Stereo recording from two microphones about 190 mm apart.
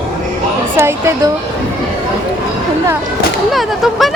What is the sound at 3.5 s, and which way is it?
Speech, centre (ahead or behind).